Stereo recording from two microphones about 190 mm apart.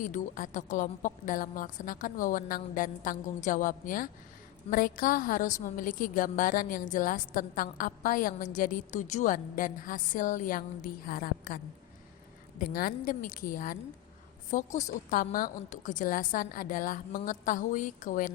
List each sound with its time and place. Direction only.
0.0 s a woman's voice: 45° left (ahead or behind)